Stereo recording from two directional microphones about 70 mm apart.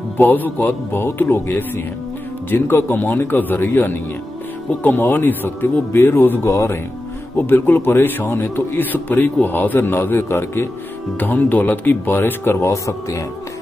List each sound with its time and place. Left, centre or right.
0.3 s a man's voice: left
7.3 s a man's voice: left
11.1 s speech: left